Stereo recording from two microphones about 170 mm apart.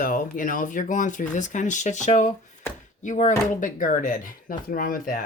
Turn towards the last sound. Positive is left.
turn(degrees=55)  # may be behind; listen again after turning